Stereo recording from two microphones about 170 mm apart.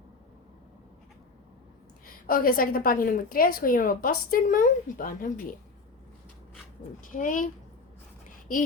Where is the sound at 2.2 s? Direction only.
55° left (ahead or behind).